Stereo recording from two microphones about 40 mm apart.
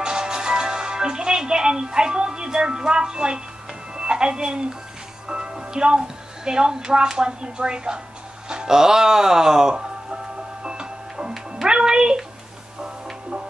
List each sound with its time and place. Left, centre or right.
0.0 s music: centre
5.3 s speech: right
8.5 s music: centre